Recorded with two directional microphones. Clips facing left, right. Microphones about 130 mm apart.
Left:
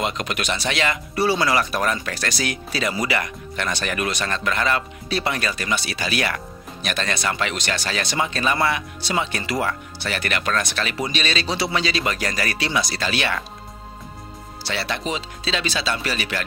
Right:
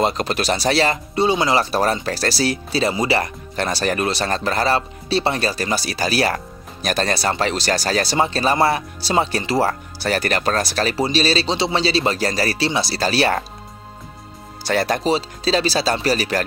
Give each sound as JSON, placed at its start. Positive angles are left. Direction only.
{"t": 0.0, "sound": "speech", "side_deg": -35}
{"t": 1.1, "sound": "speech", "side_deg": -20}
{"t": 14.6, "sound": "speech", "side_deg": -45}